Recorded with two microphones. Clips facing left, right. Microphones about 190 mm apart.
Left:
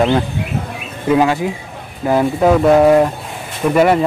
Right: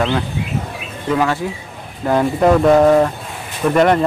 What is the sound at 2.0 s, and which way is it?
Speech, 5° left (ahead or behind).